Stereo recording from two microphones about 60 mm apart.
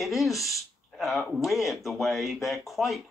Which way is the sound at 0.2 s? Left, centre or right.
Centre.